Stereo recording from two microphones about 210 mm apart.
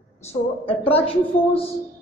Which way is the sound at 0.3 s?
25° left (ahead or behind).